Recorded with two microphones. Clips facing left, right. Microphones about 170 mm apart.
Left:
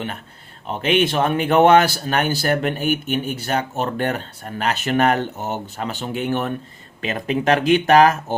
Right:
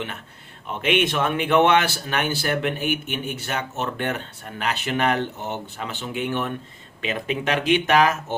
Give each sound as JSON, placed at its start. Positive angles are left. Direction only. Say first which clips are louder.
{"t": 0.7, "sound": "speech", "louder": "left 3 dB", "side_deg": 35}